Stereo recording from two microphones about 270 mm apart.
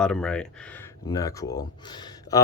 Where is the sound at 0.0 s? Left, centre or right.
Centre.